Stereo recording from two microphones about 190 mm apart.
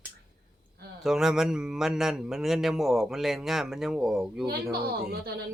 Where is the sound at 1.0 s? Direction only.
Centre (ahead or behind).